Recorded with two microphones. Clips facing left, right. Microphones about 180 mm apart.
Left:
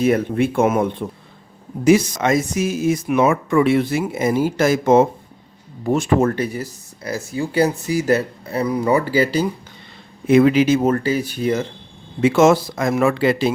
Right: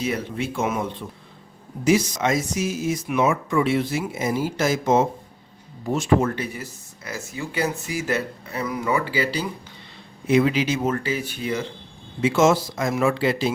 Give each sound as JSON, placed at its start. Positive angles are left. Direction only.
{"t": 0.0, "sound": "speech", "side_deg": 50}
{"t": 12.2, "sound": "speech", "side_deg": 60}